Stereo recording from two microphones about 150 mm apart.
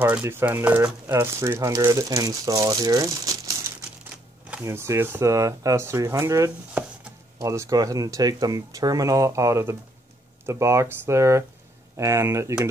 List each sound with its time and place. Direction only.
0.0 s speech: 10° right (ahead or behind)
6.8 s chopping: 10° right (ahead or behind)
7.3 s speech: 20° right (ahead or behind)